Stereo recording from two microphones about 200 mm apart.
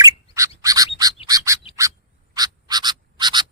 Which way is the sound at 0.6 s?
20° right (ahead or behind).